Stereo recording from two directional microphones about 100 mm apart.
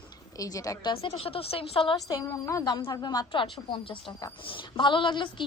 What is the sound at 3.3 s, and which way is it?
A woman's voice, 55° left (ahead or behind).